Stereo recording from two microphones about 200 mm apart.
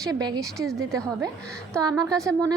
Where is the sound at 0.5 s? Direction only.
Centre (ahead or behind).